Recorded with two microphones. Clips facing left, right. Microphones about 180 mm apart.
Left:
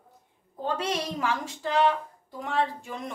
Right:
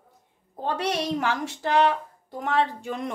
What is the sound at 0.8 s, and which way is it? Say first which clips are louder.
A woman's voice: right 6 dB; 70° right (ahead or behind).